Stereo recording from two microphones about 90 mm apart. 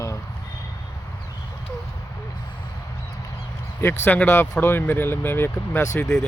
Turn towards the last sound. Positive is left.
turn(degrees=20)  # may be behind; listen again after turning